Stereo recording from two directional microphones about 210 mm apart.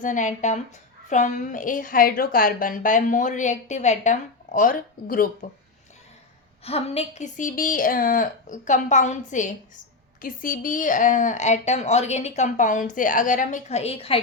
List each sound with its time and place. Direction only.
0.0 s a woman's voice: 35° left (ahead or behind)
6.7 s a woman's voice: 30° left (ahead or behind)